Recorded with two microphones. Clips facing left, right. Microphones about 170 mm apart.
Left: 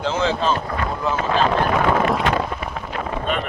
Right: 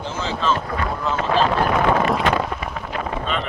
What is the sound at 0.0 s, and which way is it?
Speech, 75° left (ahead or behind).